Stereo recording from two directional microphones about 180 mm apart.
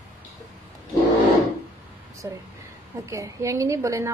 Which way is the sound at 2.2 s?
15° right (ahead or behind).